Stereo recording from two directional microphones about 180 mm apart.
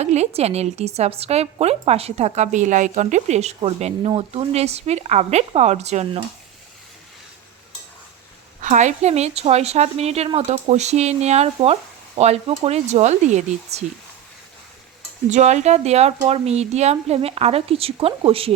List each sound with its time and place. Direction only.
0.0 s a woman's voice: 40° right (ahead or behind)
8.6 s a woman's voice: 40° right (ahead or behind)
15.3 s a woman's voice: 40° right (ahead or behind)